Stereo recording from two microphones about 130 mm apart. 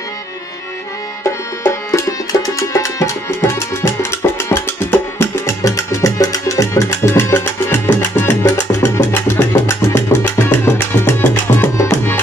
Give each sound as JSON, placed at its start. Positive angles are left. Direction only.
{"t": 1.6, "sound": "music", "side_deg": 25}